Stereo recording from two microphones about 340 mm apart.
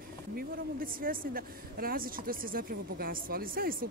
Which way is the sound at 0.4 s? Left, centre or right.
Right.